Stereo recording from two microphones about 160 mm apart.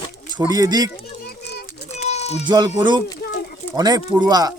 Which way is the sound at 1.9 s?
45° left (ahead or behind).